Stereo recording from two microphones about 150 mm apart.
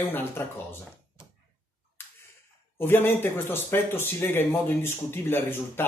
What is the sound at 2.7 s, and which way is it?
A man's voice, 15° left (ahead or behind).